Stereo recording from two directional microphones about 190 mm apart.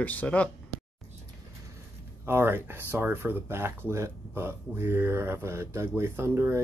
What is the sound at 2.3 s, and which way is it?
Speech, 10° right (ahead or behind).